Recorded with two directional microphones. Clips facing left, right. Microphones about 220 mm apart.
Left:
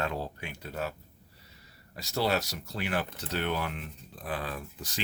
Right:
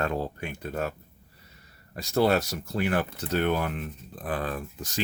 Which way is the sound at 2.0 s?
50° right (ahead or behind).